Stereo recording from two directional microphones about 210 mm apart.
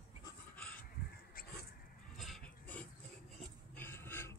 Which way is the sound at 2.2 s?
5° left (ahead or behind).